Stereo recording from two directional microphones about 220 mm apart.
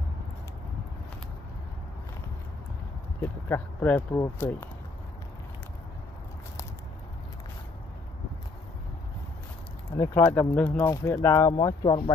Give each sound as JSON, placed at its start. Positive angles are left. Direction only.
{"t": 3.2, "sound": "speech", "side_deg": 10}
{"t": 9.9, "sound": "speech", "side_deg": 10}